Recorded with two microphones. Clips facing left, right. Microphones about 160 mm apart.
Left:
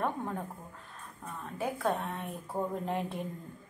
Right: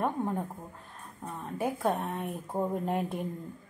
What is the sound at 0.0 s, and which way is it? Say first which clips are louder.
A woman's voice: right 3 dB; 15° right (ahead or behind).